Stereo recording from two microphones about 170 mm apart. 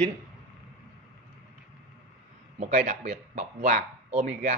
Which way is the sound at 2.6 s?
45° right (ahead or behind).